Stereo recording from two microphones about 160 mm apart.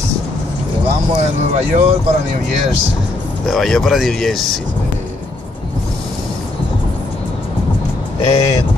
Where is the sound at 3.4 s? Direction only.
Centre (ahead or behind).